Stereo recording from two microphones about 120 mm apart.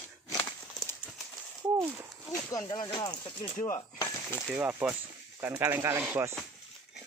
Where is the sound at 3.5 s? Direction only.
90° left.